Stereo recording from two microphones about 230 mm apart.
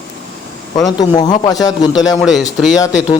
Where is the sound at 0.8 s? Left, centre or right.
Centre.